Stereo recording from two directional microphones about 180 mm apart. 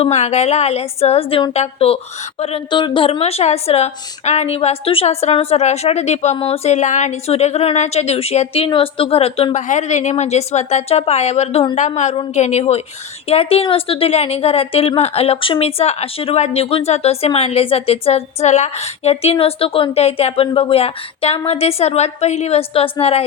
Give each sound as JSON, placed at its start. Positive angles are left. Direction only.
{"t": 0.0, "sound": "a woman's voice", "side_deg": 40}